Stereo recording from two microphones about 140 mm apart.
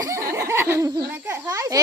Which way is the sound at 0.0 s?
20° right (ahead or behind).